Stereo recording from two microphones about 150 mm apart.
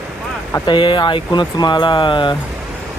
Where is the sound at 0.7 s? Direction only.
30° left (ahead or behind).